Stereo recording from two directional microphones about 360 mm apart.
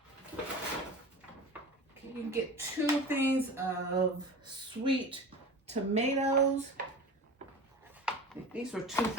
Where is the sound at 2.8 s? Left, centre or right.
Centre.